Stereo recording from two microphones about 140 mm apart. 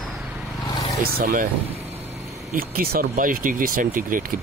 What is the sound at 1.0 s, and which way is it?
Speech, 90° right.